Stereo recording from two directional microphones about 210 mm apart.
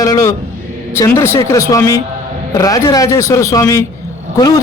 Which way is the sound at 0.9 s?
15° left (ahead or behind).